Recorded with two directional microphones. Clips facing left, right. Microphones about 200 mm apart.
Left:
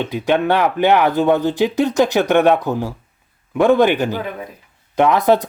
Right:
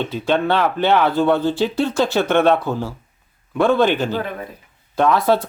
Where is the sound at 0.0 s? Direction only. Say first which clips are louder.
Left 2 dB; 15° left (ahead or behind).